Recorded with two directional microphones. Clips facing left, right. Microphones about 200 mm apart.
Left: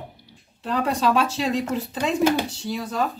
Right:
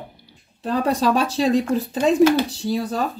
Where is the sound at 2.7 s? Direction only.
35° right (ahead or behind).